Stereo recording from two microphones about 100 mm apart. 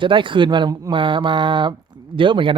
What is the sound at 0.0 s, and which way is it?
Speech, 55° right (ahead or behind).